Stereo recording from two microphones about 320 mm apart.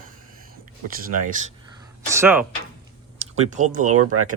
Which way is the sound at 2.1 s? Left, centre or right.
Centre.